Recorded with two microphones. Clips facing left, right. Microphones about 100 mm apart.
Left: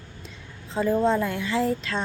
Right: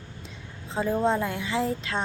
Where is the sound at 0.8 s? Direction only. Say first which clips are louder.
Left 3 dB; 15° right (ahead or behind).